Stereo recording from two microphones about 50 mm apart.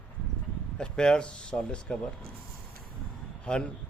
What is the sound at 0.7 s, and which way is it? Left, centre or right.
Speech, centre.